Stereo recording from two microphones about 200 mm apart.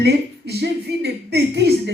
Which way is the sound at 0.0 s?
55° right (ahead or behind).